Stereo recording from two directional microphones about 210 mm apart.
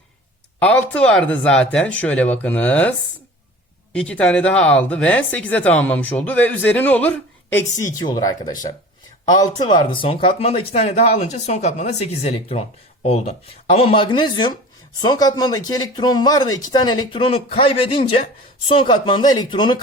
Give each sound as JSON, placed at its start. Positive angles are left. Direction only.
{"t": 0.6, "sound": "speech", "side_deg": 5}
{"t": 3.9, "sound": "speech", "side_deg": 5}